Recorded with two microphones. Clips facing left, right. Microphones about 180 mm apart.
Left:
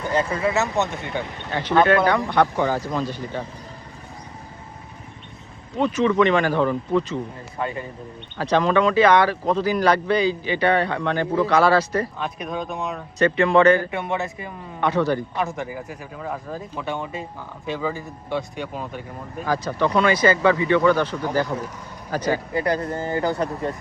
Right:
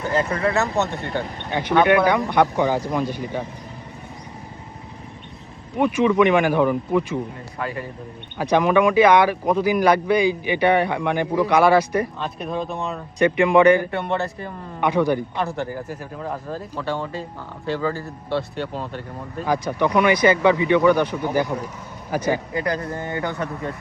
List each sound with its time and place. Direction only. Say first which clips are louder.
0.4 s speech: right 1 dB; 5° left (ahead or behind)
0.8 s speech: right 1 dB; 15° left (ahead or behind)
1.5 s speech: right 1 dB; 15° right (ahead or behind)
5.7 s speech: right 2 dB; 10° right (ahead or behind)
7.6 s speech: left 1 dB; 25° left (ahead or behind)
8.4 s speech: right 2 dB; 15° right (ahead or behind)
12.2 s speech: right 1 dB; centre (ahead or behind)
13.1 s speech: right 1 dB; 15° right (ahead or behind)
13.9 s speech: right 2 dB; centre (ahead or behind)
14.8 s speech: right 1 dB; 15° right (ahead or behind)
15.4 s speech: right 1 dB; centre (ahead or behind)
16.8 s speech: right 3 dB; 15° left (ahead or behind)
19.5 s speech: right 1 dB; 15° right (ahead or behind)
22.5 s speech: left 2 dB; 30° left (ahead or behind)